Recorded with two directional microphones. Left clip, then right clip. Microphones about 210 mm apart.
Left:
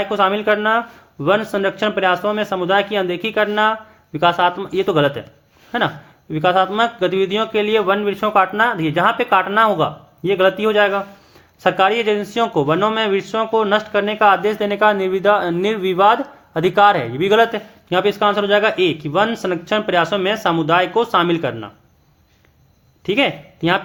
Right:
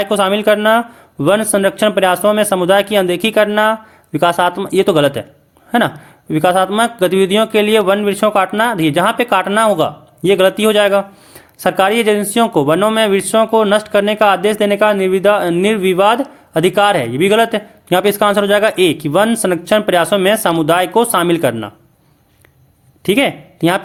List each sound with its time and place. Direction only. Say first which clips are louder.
0.0 s a man's voice: right 4 dB; 35° right (ahead or behind)
23.0 s speech: right 4 dB; 35° right (ahead or behind)